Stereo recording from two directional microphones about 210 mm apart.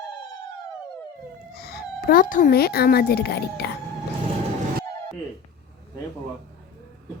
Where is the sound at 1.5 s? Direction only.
45° left (ahead or behind).